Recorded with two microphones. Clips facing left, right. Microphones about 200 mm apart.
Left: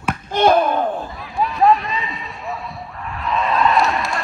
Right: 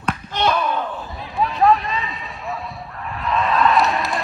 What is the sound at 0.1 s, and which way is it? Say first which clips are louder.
Basketball bounce: left 6 dB; 50° left (ahead or behind).